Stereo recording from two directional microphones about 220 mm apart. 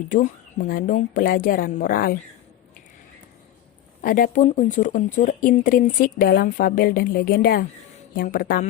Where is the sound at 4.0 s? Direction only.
40° left (ahead or behind).